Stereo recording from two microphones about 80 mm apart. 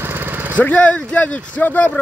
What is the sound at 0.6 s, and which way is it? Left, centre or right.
Speech, centre.